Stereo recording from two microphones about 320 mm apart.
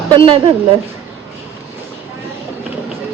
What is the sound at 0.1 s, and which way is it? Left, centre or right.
Speech, centre.